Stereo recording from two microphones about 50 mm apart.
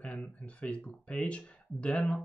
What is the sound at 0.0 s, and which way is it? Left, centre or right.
Speech, left.